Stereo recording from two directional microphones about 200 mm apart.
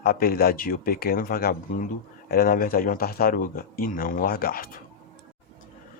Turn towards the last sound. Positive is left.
turn(degrees=45)  # may be behind; listen again after turning